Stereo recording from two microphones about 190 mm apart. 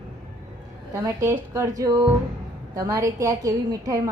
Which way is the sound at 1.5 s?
15° right (ahead or behind).